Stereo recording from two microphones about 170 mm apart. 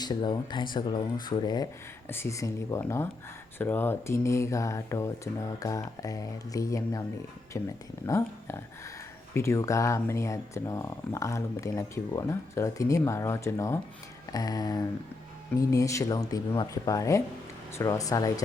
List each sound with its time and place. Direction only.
0.0 s speech: 25° left (ahead or behind)
2.0 s speech: 15° left (ahead or behind)